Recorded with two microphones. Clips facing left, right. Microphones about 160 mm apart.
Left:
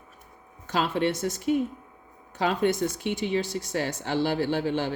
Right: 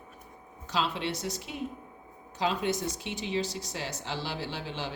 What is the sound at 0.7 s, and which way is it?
Speech, 50° left (ahead or behind).